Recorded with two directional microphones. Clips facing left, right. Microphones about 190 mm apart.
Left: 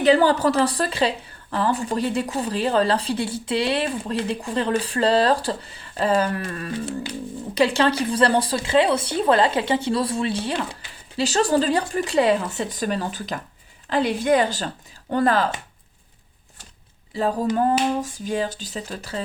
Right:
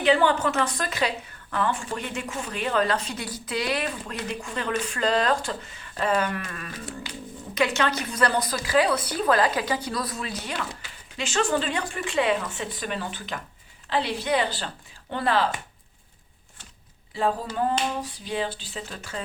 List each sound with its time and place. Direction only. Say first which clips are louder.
0.0 s a woman's voice: left 4 dB; 35° left (ahead or behind)
18.0 s speech: left 4 dB; 45° left (ahead or behind)